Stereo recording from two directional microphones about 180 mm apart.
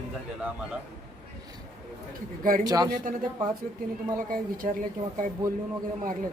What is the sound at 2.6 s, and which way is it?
Speech, 20° right (ahead or behind).